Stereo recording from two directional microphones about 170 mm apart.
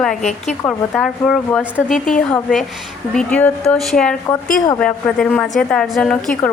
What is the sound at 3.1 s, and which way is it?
A woman's voice, 5° left (ahead or behind).